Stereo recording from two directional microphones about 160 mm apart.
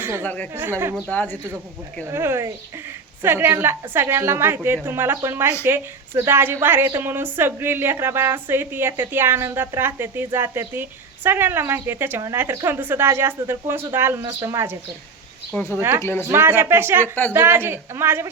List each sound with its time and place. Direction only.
0.2 s speech: 10° left (ahead or behind)
0.5 s a woman's voice: 15° right (ahead or behind)
1.0 s speech: 10° left (ahead or behind)
2.0 s a woman's voice: 15° right (ahead or behind)
16.0 s speech: 15° left (ahead or behind)
16.3 s a woman's voice: 15° right (ahead or behind)